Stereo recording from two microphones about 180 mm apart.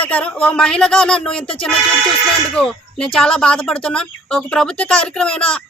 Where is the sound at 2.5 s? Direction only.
5° left (ahead or behind).